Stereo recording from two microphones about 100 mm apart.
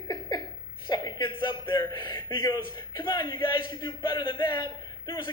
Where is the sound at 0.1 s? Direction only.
45° left (ahead or behind).